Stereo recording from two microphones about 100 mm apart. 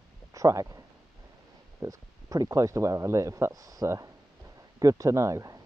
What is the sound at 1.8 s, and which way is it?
Speech, 35° right (ahead or behind).